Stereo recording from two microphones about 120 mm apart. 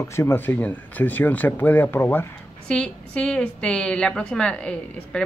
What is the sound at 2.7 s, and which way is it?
A woman's voice, 5° left (ahead or behind).